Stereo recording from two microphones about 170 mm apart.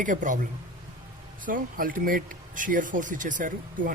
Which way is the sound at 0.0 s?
50° right (ahead or behind).